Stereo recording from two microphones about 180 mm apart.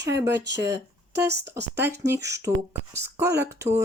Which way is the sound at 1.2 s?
65° right (ahead or behind).